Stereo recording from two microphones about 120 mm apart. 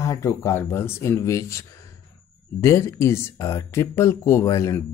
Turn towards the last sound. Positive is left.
turn(degrees=25)  # may be behind; listen again after turning